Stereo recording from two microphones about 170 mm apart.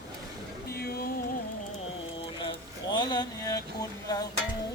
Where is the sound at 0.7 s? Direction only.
65° left (ahead or behind).